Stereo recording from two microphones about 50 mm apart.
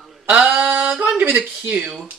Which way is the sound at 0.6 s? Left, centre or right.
Centre.